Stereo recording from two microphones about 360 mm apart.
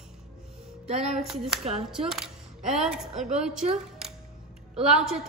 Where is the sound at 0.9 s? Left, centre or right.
Centre.